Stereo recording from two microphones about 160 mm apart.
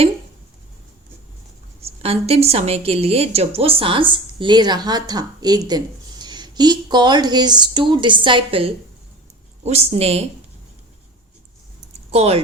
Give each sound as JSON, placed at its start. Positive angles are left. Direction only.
{"t": 1.8, "sound": "a woman's voice", "side_deg": -40}
{"t": 12.1, "sound": "a woman's voice", "side_deg": -40}